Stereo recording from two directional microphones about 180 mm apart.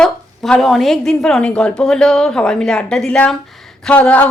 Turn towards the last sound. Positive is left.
turn(degrees=10)  # may be behind; listen again after turning